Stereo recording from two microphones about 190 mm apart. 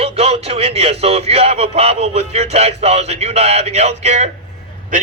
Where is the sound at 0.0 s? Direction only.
30° right (ahead or behind).